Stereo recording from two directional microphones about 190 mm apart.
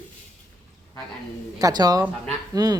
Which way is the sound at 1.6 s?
20° right (ahead or behind).